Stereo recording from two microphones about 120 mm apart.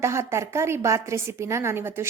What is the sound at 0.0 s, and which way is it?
A woman's voice, 25° right (ahead or behind).